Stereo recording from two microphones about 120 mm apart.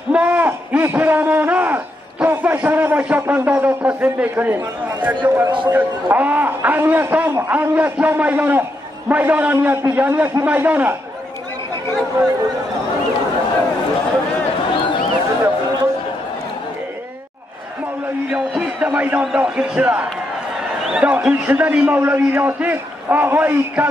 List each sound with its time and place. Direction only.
0.1 s a sound: 10° right (ahead or behind)
5.2 s a man's voice: 10° right (ahead or behind)
18.3 s a man's voice: 10° right (ahead or behind)